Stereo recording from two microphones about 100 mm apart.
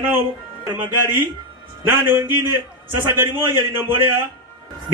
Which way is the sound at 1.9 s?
20° right (ahead or behind).